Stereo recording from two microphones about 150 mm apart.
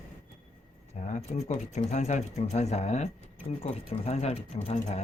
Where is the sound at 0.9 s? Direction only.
50° left (ahead or behind).